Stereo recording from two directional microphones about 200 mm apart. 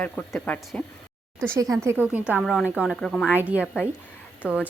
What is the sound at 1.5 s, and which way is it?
A woman's voice, 15° right (ahead or behind).